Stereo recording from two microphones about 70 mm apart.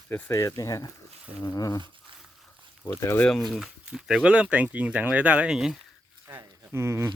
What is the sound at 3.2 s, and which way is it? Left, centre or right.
Speech, centre.